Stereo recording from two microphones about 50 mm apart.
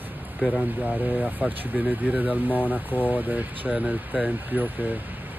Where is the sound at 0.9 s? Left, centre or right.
Right.